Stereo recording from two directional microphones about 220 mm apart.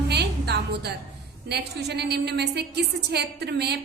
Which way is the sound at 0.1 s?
50° right (ahead or behind).